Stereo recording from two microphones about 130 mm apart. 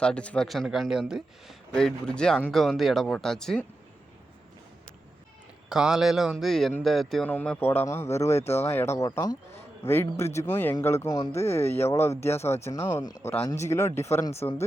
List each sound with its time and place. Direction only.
0.0 s speech: 10° left (ahead or behind)
5.6 s speech: 5° right (ahead or behind); by 9.4 s 30° left (ahead or behind)
9.8 s speech: 20° left (ahead or behind)